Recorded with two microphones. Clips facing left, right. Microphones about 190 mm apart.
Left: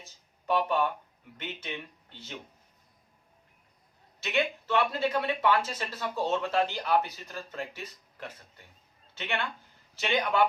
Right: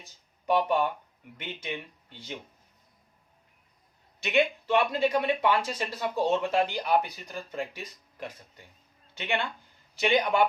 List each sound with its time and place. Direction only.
0.0 s a sound: 15° right (ahead or behind)
1.4 s speech: 10° right (ahead or behind)
4.2 s speech: 15° right (ahead or behind)